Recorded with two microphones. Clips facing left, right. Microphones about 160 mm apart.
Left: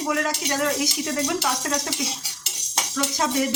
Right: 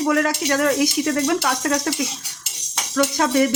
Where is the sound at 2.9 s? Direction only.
65° right (ahead or behind).